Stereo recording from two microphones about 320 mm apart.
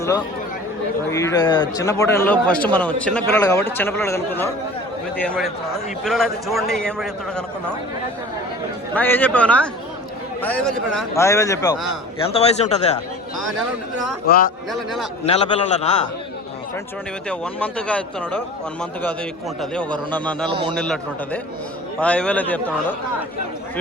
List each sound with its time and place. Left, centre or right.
1.1 s a man's voice: centre
9.0 s a man's voice: centre
11.1 s a man's voice: centre
14.3 s speech: left
17.2 s a man's voice: centre
20.5 s a man's voice: centre
20.7 s a man's voice: centre